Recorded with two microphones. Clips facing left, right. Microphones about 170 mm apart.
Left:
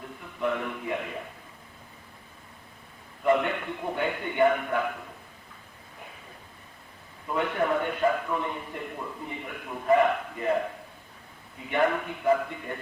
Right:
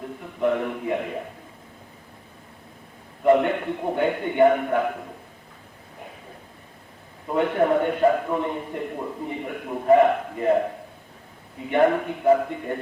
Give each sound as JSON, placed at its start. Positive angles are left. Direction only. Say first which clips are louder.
{"t": 0.2, "sound": "a man's voice", "louder": "right 6 dB", "side_deg": -40}
{"t": 3.2, "sound": "a man's voice", "louder": "right 6 dB", "side_deg": -35}
{"t": 7.3, "sound": "a man's voice", "louder": "right 6 dB", "side_deg": -35}
{"t": 11.7, "sound": "a man's voice", "louder": "right 6 dB", "side_deg": -35}